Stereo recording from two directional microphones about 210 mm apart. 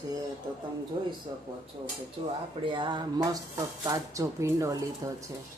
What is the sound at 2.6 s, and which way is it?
Speech, 20° right (ahead or behind).